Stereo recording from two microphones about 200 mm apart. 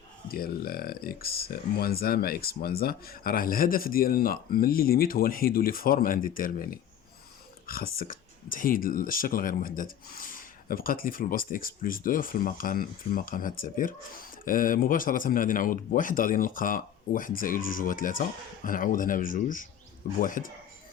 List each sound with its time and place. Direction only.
0.3 s speech: 50° left (ahead or behind)